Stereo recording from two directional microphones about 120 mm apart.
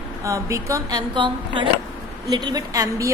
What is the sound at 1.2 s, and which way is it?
A woman's voice, 40° right (ahead or behind).